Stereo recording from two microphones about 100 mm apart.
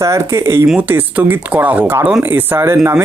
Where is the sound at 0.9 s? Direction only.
15° right (ahead or behind).